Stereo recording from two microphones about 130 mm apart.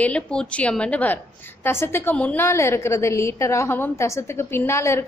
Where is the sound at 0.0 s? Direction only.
10° left (ahead or behind).